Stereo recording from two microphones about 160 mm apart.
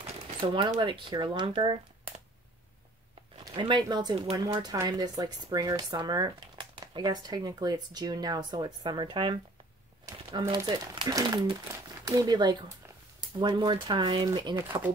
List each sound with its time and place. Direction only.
0.0 s a sound: 35° right (ahead or behind)
0.7 s speech: 30° right (ahead or behind)
3.5 s speech: 25° right (ahead or behind)